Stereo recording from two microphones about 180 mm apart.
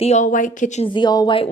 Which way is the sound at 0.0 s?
40° left (ahead or behind).